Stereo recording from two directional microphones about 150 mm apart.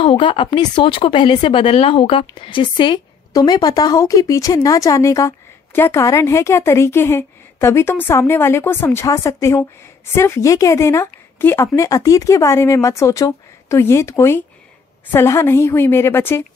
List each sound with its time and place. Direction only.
0.0 s a woman's voice: 35° left (ahead or behind); by 16.4 s 15° left (ahead or behind)